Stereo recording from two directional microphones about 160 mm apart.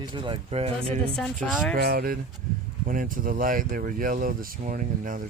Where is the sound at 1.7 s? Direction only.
65° right (ahead or behind).